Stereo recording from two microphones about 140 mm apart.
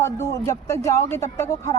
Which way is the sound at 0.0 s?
20° left (ahead or behind).